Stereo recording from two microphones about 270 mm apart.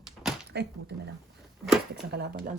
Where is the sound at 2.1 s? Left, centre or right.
Right.